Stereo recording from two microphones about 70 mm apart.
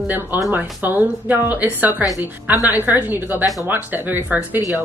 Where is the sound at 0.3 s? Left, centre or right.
Right.